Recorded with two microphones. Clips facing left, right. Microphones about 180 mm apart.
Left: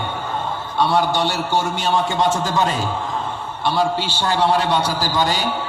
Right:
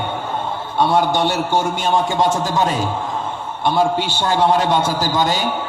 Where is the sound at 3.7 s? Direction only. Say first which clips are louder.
Right 3 dB; 50° right (ahead or behind).